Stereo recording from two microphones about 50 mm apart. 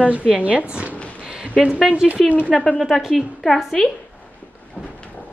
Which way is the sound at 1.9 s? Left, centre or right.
Right.